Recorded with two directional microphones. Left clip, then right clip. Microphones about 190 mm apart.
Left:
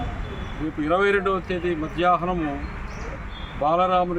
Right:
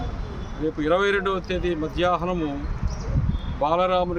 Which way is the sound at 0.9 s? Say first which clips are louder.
Left 1 dB; 30° right (ahead or behind).